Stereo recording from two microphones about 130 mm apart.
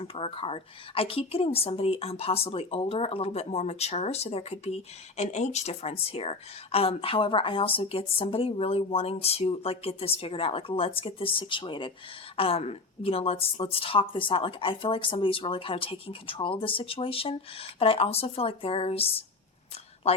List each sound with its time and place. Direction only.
0.0 s a woman's voice: 45° left (ahead or behind)
12.4 s a woman's voice: 50° left (ahead or behind)